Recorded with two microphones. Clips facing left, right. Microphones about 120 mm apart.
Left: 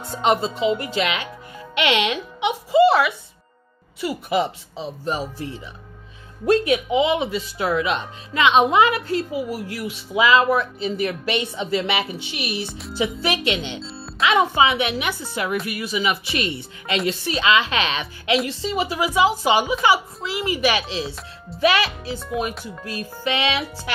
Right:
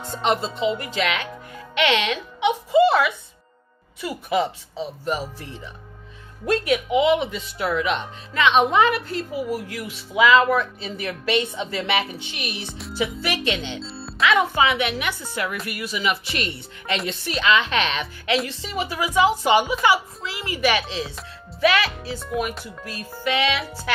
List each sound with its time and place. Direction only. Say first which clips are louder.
0.2 s a woman's voice: left 3 dB; 15° left (ahead or behind)
2.8 s music: left 2 dB; 5° left (ahead or behind)
4.0 s a woman's voice: left 1 dB; 10° left (ahead or behind)
6.4 s a woman's voice: left 3 dB; 25° left (ahead or behind)
11.0 s a woman's voice: right 2 dB; 25° left (ahead or behind)
13.0 s a woman's voice: left 2 dB; 20° left (ahead or behind)
16.9 s music: left 3 dB; centre (ahead or behind)
17.3 s a woman's voice: even; 15° left (ahead or behind)
22.5 s music: left 1 dB; centre (ahead or behind)
23.2 s a woman's voice: right 1 dB; 15° left (ahead or behind)